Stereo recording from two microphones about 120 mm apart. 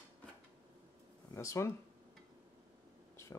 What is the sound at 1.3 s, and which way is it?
Speech, 25° left (ahead or behind).